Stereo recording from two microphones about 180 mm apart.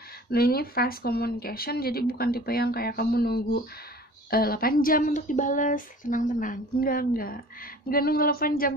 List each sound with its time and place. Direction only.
0.3 s speech: 55° left (ahead or behind)